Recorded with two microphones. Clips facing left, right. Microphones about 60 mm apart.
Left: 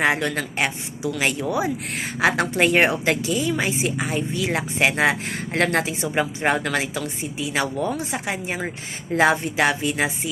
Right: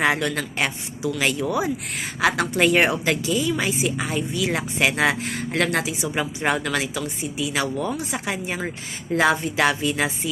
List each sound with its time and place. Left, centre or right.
0.0 s speech: left
5.5 s speech: left